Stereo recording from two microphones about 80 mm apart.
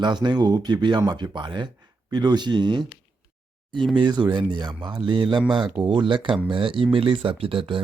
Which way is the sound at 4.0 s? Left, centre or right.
Right.